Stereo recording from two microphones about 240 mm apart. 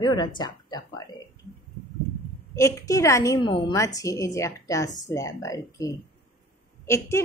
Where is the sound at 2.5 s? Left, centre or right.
Centre.